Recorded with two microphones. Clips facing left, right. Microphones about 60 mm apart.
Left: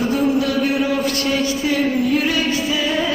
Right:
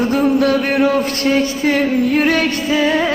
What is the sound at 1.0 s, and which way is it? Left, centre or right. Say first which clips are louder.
Speech: right 3 dB; right.